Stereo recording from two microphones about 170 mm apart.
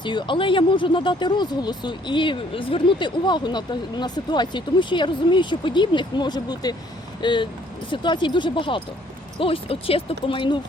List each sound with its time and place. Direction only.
0.0 s speech: 25° left (ahead or behind)